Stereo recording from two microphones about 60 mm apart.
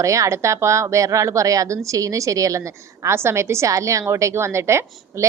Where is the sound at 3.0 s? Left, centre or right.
Right.